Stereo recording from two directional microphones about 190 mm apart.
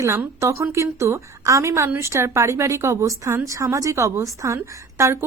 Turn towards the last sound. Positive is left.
turn(degrees=-15)  # may be behind; listen again after turning